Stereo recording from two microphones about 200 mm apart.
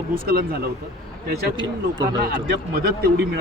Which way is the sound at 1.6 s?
20° right (ahead or behind).